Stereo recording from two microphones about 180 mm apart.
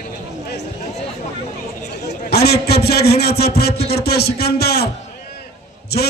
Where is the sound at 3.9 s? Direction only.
60° left (ahead or behind).